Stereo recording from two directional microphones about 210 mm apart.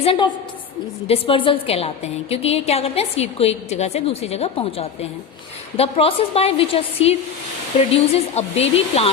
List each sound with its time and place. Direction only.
0.0 s a woman's voice: 25° left (ahead or behind)